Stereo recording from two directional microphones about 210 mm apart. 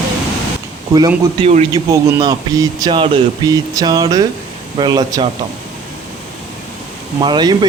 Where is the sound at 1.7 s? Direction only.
15° right (ahead or behind).